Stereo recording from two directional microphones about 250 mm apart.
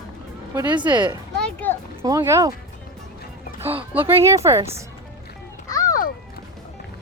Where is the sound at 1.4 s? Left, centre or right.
Centre.